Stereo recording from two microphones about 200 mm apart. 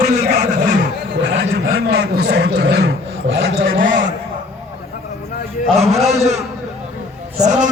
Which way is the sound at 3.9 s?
40° right (ahead or behind).